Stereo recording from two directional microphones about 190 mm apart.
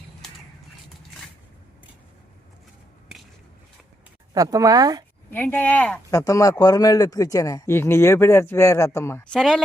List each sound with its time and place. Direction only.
4.4 s speech: 20° right (ahead or behind)
5.3 s speech: 10° left (ahead or behind)